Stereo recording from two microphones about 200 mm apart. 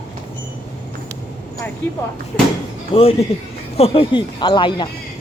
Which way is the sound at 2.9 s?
25° left (ahead or behind).